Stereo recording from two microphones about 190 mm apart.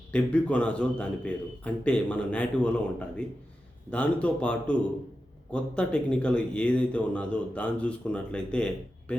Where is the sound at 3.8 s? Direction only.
5° left (ahead or behind).